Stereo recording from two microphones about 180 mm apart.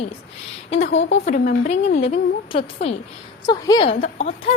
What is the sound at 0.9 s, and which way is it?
Speech, 90° left.